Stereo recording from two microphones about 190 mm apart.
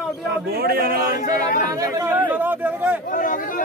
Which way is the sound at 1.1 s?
45° left (ahead or behind).